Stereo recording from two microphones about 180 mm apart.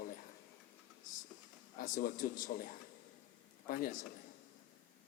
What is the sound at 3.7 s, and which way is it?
Speech, 50° left (ahead or behind).